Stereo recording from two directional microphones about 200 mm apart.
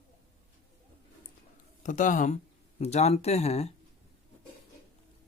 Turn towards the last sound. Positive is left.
turn(degrees=35)  # may be behind; listen again after turning